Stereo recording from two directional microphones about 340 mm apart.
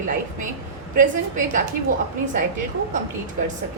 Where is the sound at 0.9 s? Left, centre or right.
Right.